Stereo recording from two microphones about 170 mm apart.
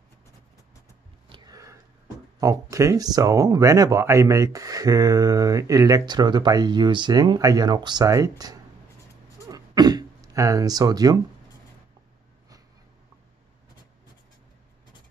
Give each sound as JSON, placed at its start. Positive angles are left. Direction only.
{"t": 1.3, "sound": "a sound", "side_deg": -20}
{"t": 2.4, "sound": "speech", "side_deg": -20}
{"t": 9.5, "sound": "throat clearing", "side_deg": -25}